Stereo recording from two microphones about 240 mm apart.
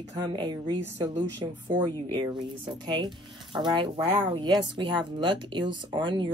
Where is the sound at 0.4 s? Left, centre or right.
Centre.